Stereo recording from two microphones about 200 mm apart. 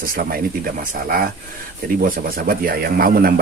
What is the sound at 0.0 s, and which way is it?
Speech, 45° right (ahead or behind).